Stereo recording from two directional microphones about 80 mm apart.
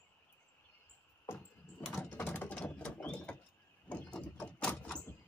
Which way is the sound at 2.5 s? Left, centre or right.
Centre.